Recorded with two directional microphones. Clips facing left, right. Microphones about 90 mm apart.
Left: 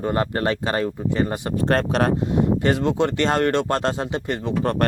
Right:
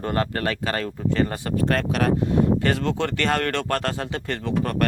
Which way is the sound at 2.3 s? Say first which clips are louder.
Left 1 dB; 20° left (ahead or behind).